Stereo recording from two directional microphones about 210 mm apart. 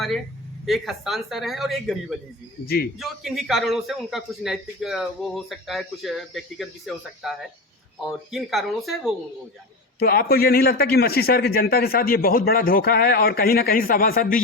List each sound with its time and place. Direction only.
0.6 s a man's voice: centre (ahead or behind)
2.6 s a man's voice: 45° left (ahead or behind)
3.0 s a man's voice: centre (ahead or behind)
10.0 s a man's voice: 45° left (ahead or behind)